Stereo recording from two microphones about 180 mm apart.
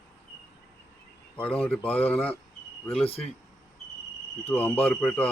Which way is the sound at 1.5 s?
5° left (ahead or behind).